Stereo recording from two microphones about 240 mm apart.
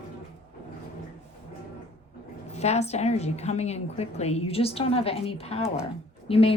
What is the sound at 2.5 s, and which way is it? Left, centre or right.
A woman's voice, left.